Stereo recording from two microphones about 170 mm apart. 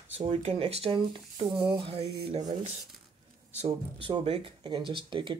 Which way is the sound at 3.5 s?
30° right (ahead or behind).